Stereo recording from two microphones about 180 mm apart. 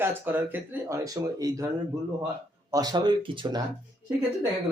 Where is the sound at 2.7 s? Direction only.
20° right (ahead or behind).